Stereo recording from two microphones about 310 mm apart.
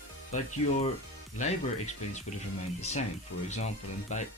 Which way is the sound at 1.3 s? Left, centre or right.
Left.